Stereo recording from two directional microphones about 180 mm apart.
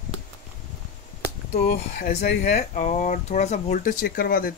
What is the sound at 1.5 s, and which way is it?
Speech, 60° left (ahead or behind).